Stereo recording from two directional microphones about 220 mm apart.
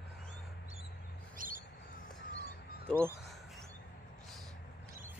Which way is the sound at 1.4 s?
40° right (ahead or behind).